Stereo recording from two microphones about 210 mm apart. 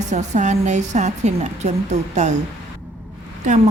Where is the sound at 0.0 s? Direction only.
35° right (ahead or behind).